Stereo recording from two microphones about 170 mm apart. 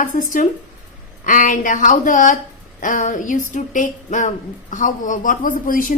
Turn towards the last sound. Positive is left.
turn(degrees=55)  # may be behind; listen again after turning